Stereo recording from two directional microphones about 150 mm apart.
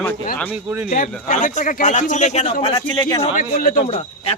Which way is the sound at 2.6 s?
35° left (ahead or behind).